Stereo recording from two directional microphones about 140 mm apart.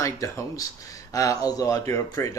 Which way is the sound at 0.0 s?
20° left (ahead or behind).